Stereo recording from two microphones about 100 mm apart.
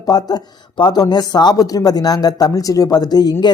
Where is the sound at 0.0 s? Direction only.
40° left (ahead or behind).